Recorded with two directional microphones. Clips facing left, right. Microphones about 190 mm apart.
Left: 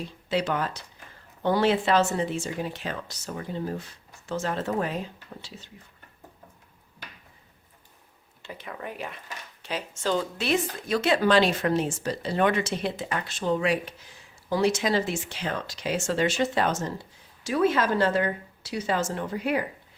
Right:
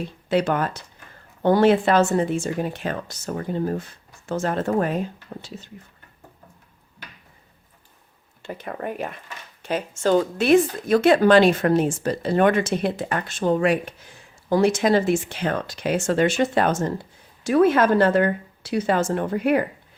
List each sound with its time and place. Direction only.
0.0 s speech: 55° right (ahead or behind)
8.4 s speech: 50° right (ahead or behind)